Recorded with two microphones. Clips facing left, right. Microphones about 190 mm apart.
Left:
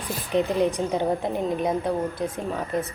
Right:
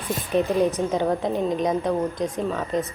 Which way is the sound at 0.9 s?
15° right (ahead or behind).